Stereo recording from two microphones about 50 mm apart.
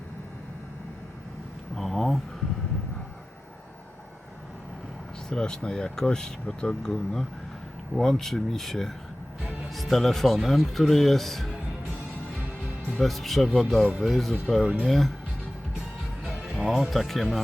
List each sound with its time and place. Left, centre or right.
1.7 s a sound: centre
5.3 s speech: centre
12.9 s speech: centre
16.4 s music: centre
16.6 s speech: centre
16.9 s speech: centre